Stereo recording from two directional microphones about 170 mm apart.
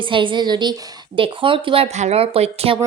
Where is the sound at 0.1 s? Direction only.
30° right (ahead or behind).